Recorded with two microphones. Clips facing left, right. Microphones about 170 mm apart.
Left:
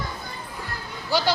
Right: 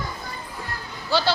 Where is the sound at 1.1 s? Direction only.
15° left (ahead or behind).